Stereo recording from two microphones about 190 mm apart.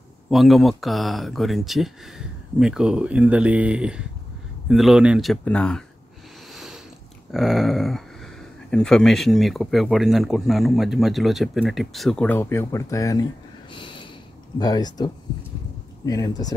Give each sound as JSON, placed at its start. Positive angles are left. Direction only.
{"t": 0.3, "sound": "speech", "side_deg": 0}
{"t": 6.5, "sound": "a sound", "side_deg": 0}
{"t": 7.3, "sound": "speech", "side_deg": 0}
{"t": 16.1, "sound": "speech", "side_deg": 20}